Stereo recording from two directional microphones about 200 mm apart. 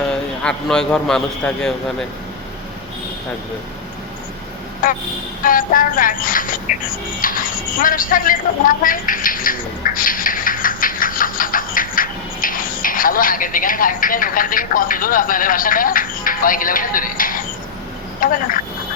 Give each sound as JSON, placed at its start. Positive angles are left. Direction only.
{"t": 0.1, "sound": "a man's voice", "side_deg": 5}
{"t": 5.4, "sound": "speech", "side_deg": 45}
{"t": 7.8, "sound": "bird", "side_deg": 45}
{"t": 18.2, "sound": "speech", "side_deg": 45}